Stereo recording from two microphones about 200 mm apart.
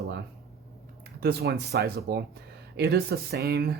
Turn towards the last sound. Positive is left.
turn(degrees=-55)  # may be behind; listen again after turning